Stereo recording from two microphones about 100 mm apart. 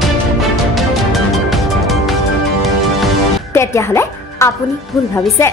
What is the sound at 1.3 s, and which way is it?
Music, centre (ahead or behind).